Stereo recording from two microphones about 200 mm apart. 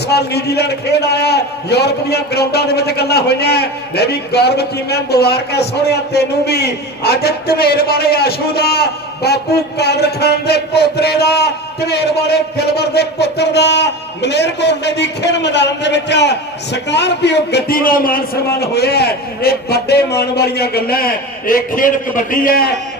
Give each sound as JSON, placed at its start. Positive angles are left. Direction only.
{"t": 0.1, "sound": "a man's voice", "side_deg": 55}